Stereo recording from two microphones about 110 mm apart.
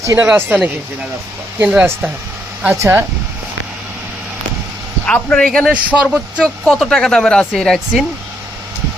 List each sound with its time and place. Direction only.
0.0 s speech: 30° right (ahead or behind)
0.3 s a man's voice: 15° right (ahead or behind)
2.7 s speech: 25° right (ahead or behind)
5.0 s speech: 10° left (ahead or behind)
5.7 s a man's voice: 15° right (ahead or behind)
6.4 s speech: 5° left (ahead or behind)